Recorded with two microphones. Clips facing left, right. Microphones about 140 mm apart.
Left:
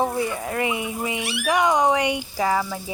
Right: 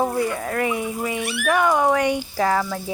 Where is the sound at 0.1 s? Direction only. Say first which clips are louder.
Right 2 dB; 15° left (ahead or behind).